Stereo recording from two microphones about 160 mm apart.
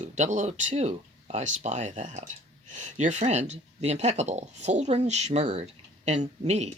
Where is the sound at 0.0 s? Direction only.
50° right (ahead or behind).